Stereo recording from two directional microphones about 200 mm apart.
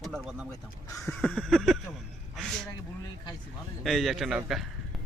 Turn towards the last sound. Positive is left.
turn(degrees=0)  # may be behind; listen again after turning